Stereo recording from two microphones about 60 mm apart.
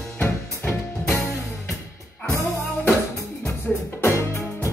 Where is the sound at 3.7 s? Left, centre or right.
Centre.